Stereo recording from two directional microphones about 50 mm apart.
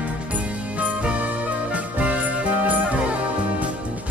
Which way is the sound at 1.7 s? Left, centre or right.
Right.